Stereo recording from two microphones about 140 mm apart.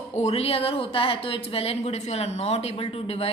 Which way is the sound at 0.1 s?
50° left (ahead or behind).